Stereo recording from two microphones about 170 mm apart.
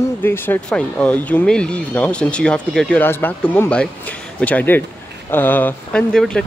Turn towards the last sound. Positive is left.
turn(degrees=5)  # may be behind; listen again after turning